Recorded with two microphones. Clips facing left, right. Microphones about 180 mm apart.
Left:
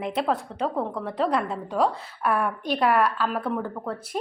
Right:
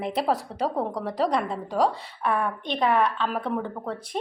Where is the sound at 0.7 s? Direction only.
40° right (ahead or behind).